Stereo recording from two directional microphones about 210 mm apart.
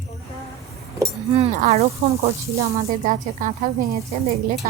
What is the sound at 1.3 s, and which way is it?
A woman's voice, 30° right (ahead or behind).